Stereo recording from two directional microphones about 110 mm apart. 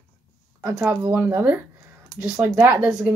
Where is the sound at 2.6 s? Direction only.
10° right (ahead or behind).